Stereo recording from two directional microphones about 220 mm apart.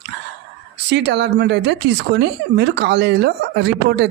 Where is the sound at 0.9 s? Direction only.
50° right (ahead or behind).